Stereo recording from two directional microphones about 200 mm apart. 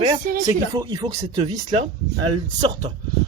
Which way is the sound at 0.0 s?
15° right (ahead or behind).